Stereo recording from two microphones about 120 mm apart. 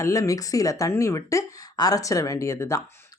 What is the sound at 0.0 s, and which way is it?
Speech, 25° left (ahead or behind).